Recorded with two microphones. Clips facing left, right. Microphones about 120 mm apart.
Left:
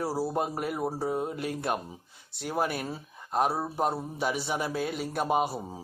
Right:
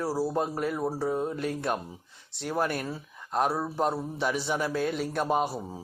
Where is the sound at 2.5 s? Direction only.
10° left (ahead or behind).